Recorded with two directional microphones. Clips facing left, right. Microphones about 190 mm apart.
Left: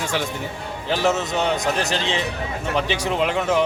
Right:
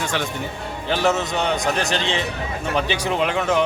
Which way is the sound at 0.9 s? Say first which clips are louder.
Right 1 dB; centre (ahead or behind).